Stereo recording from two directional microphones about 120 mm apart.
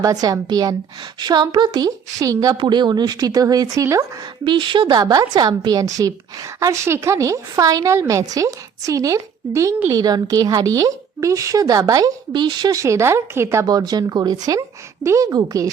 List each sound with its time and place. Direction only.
0.0 s a woman's voice: 30° right (ahead or behind)
2.6 s a woman's voice: 40° right (ahead or behind)
4.4 s a woman's voice: 40° right (ahead or behind); by 13.7 s 20° right (ahead or behind)
13.7 s a woman's voice: 35° right (ahead or behind)